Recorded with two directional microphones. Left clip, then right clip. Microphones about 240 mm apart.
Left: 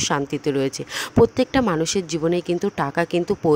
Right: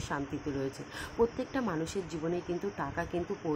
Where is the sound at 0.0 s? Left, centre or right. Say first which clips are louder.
Left 14 dB; left.